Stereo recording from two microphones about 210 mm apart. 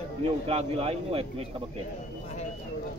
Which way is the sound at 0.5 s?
30° right (ahead or behind).